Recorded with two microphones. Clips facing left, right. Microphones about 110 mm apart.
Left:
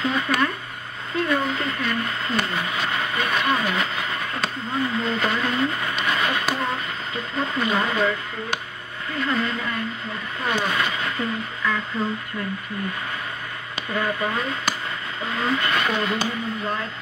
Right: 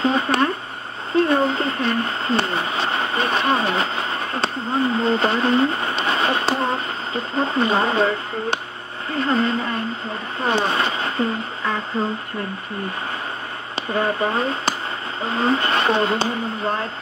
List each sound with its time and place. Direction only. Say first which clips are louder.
0.0 s a sound: right 4 dB; 30° right (ahead or behind)
9.1 s speech: right 5 dB; 30° right (ahead or behind)
13.7 s speech: right 4 dB; 30° right (ahead or behind)